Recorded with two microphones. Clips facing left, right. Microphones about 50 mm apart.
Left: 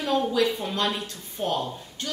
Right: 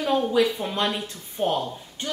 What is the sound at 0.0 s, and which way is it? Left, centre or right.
A woman's voice, centre.